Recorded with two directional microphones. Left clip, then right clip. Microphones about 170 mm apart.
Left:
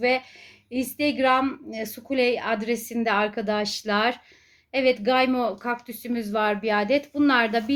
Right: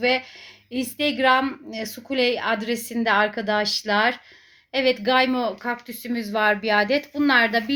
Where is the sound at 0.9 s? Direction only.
Centre (ahead or behind).